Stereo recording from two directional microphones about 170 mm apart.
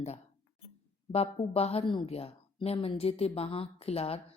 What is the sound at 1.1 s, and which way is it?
A woman's voice, 35° left (ahead or behind).